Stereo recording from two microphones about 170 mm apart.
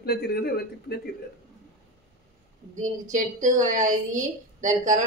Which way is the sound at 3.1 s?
50° right (ahead or behind).